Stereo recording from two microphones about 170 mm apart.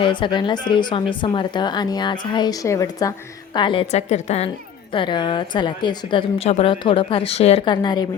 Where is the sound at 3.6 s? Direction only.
30° left (ahead or behind).